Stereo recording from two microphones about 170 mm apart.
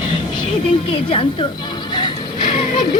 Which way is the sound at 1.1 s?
30° left (ahead or behind).